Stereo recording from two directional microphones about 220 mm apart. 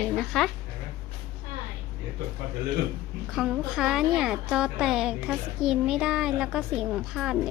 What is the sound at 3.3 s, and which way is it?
A woman's voice, centre (ahead or behind).